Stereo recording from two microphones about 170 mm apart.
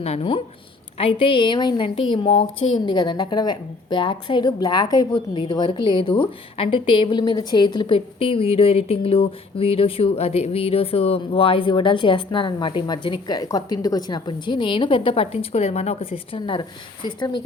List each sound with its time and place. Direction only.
0.0 s a woman's voice: 35° left (ahead or behind)